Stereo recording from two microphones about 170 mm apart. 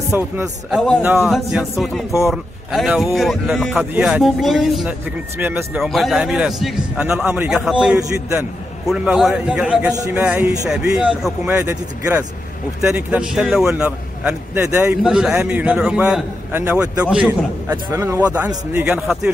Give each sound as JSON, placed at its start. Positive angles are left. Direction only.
{"t": 0.1, "sound": "a man's voice", "side_deg": -10}
{"t": 9.8, "sound": "speech", "side_deg": -20}
{"t": 10.2, "sound": "a man's voice", "side_deg": -10}
{"t": 15.0, "sound": "a man's voice", "side_deg": -5}